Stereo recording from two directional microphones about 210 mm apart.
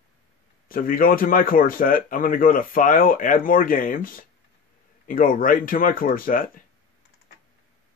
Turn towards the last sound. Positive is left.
turn(degrees=40)  # may be behind; listen again after turning